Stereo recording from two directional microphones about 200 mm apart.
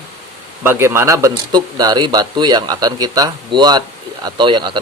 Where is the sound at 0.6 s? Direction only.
10° right (ahead or behind).